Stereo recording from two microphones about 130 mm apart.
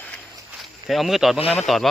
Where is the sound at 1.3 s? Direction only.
50° left (ahead or behind).